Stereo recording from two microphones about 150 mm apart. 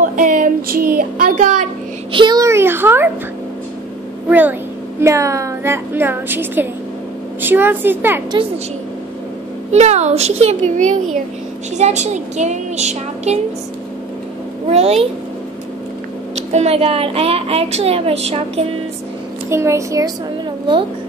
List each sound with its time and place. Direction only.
0.0 s child singing: 60° right (ahead or behind)
2.1 s a sound: 25° right (ahead or behind)
4.3 s a woman's voice: 10° right (ahead or behind)
9.7 s a woman's voice: 45° right (ahead or behind)
14.7 s a woman's voice: 45° right (ahead or behind)
16.3 s a woman's voice: 45° right (ahead or behind)
19.5 s speech: 20° right (ahead or behind)